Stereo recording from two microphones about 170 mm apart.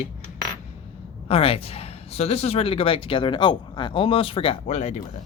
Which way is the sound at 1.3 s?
35° left (ahead or behind).